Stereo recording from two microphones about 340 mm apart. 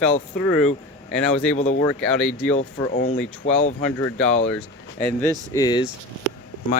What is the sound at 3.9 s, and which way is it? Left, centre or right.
Speech, centre.